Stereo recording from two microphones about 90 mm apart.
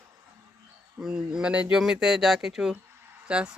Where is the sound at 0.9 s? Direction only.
10° right (ahead or behind).